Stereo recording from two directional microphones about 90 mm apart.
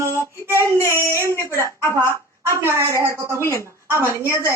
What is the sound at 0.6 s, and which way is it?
Child singing, 30° left (ahead or behind).